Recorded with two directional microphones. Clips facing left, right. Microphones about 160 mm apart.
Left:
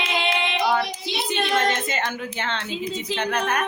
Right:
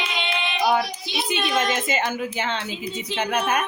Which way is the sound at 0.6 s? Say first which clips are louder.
Right 4 dB; 10° right (ahead or behind).